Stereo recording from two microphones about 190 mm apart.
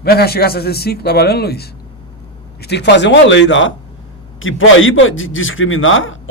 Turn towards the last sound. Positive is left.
turn(degrees=90)